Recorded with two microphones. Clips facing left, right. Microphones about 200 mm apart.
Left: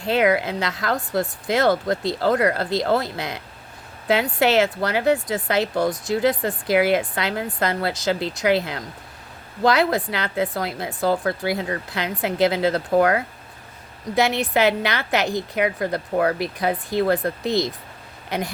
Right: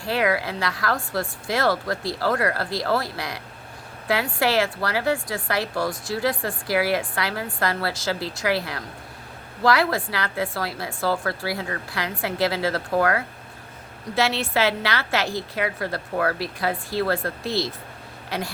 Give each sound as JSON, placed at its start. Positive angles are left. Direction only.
{"t": 0.0, "sound": "a woman's voice", "side_deg": 20}